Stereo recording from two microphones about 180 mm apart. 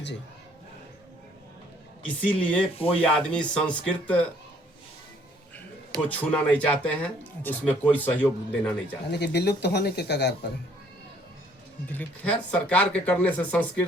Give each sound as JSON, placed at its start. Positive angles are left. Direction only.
{"t": 2.2, "sound": "speech", "side_deg": 5}
{"t": 6.1, "sound": "speech", "side_deg": 10}
{"t": 9.0, "sound": "speech", "side_deg": 70}
{"t": 11.9, "sound": "speech", "side_deg": 10}